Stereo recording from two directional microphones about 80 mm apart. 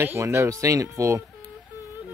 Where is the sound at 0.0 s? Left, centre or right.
Right.